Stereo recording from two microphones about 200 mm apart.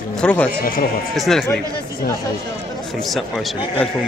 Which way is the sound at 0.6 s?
45° left (ahead or behind).